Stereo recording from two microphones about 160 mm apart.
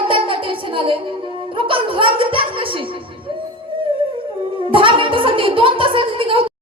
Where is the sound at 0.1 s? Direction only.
35° right (ahead or behind).